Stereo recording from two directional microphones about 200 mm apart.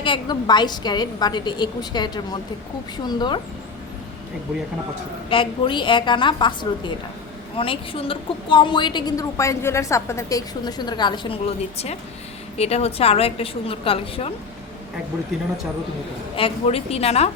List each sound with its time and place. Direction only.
0.0 s a woman's voice: 20° left (ahead or behind)
5.3 s a woman's voice: 25° left (ahead or behind)
16.3 s a woman's voice: 30° left (ahead or behind)